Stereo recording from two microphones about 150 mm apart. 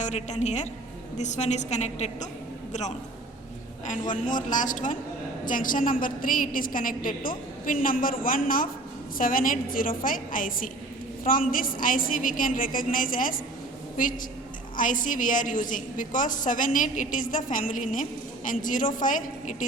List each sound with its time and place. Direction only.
0.0 s a woman's voice: 50° left (ahead or behind)
3.8 s a woman's voice: 60° left (ahead or behind)